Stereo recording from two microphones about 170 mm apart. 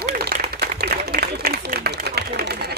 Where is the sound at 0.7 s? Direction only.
70° right (ahead or behind).